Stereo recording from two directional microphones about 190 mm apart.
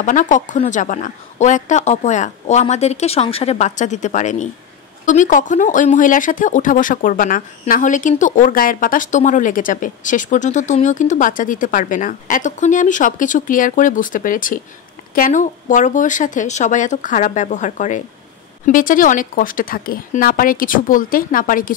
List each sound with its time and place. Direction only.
0.0 s a woman's voice: 40° left (ahead or behind)